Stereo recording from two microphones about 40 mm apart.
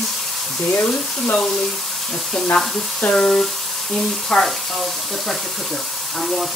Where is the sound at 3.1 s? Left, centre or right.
Centre.